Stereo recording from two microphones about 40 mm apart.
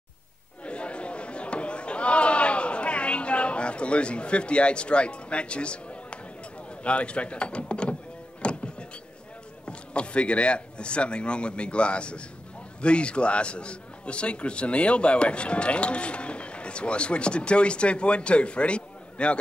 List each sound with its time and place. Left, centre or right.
0.7 s a sound: left
6.8 s a man's voice: left
8.4 s music: left
9.7 s a man's voice: left